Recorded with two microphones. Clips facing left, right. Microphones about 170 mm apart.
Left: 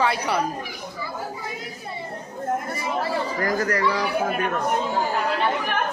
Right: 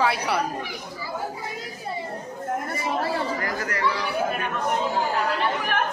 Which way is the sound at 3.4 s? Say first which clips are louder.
Left 4 dB; 40° left (ahead or behind).